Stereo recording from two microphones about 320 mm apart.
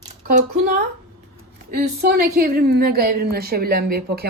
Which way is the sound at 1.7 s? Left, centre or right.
Right.